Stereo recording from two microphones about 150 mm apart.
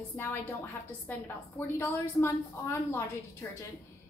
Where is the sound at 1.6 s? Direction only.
15° left (ahead or behind).